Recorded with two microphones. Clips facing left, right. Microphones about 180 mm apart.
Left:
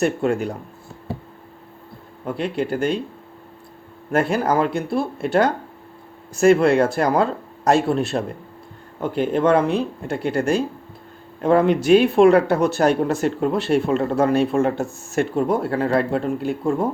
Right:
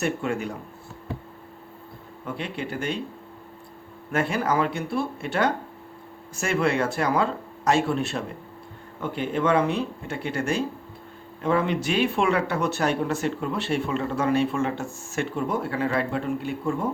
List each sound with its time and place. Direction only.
0.0 s speech: 40° left (ahead or behind)
2.2 s speech: 40° left (ahead or behind)
4.1 s speech: 40° left (ahead or behind)